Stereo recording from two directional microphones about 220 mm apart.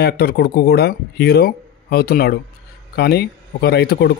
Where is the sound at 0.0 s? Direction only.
45° left (ahead or behind).